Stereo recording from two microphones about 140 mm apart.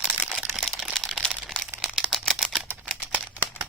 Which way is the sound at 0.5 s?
Centre (ahead or behind).